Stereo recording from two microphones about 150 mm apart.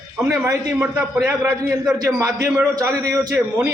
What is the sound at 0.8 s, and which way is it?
A man's voice, 5° right (ahead or behind).